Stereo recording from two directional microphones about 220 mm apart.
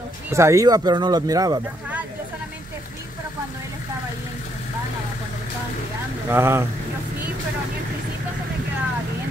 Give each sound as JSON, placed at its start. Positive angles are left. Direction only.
{"t": 0.3, "sound": "speech", "side_deg": -15}
{"t": 6.3, "sound": "speech", "side_deg": -10}